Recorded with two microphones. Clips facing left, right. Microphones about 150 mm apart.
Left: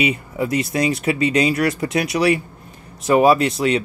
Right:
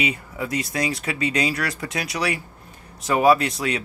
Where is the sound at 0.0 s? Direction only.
20° left (ahead or behind).